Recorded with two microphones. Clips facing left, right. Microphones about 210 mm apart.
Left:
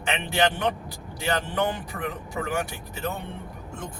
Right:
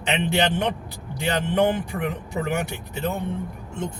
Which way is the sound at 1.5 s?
25° right (ahead or behind).